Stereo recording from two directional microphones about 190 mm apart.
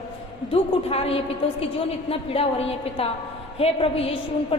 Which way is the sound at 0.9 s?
30° left (ahead or behind).